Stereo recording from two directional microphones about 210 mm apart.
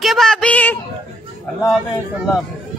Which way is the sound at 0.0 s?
Centre (ahead or behind).